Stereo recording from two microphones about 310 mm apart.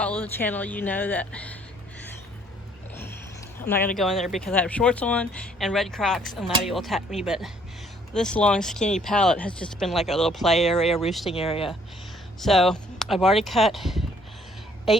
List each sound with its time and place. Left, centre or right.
0.0 s speech: centre
2.9 s a sound: centre
3.9 s speech: centre
11.3 s speech: centre
12.4 s a woman's voice: centre